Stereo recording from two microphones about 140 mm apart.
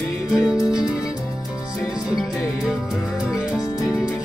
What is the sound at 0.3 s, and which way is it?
Music, 5° right (ahead or behind).